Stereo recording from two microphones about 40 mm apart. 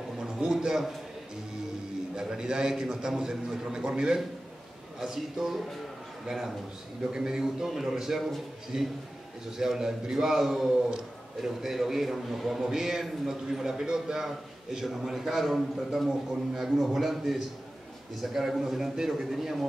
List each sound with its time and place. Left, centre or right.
0.2 s a man's voice: centre
2.1 s a man's voice: centre
5.0 s a man's voice: centre
7.1 s a man's voice: centre